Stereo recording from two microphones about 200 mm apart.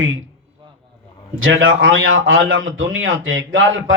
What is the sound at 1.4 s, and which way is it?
A man's voice, 75° right (ahead or behind).